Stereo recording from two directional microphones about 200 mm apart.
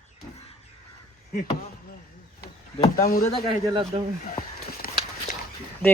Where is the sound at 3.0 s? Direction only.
45° left (ahead or behind).